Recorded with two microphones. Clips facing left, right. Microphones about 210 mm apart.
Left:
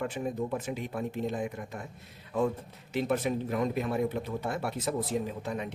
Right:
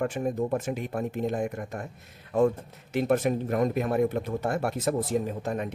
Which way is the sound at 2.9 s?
45° right (ahead or behind).